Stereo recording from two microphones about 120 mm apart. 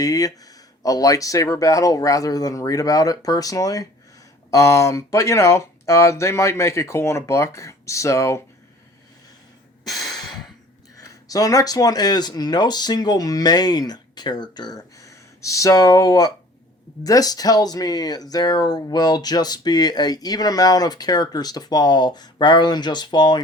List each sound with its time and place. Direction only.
0.0 s speech: 30° left (ahead or behind)
10.1 s breathing: 35° left (ahead or behind)
10.9 s speech: 30° left (ahead or behind)